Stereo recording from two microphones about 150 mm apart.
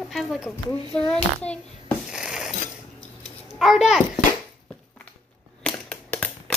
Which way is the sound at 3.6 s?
Centre (ahead or behind).